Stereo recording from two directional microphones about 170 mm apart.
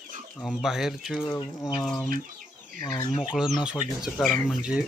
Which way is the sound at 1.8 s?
5° left (ahead or behind).